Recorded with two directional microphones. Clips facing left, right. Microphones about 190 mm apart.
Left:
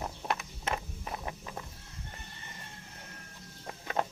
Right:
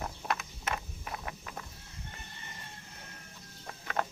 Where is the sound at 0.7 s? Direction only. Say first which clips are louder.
Left 2 dB; 25° left (ahead or behind).